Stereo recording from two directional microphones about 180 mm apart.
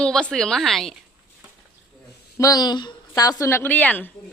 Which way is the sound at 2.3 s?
20° left (ahead or behind).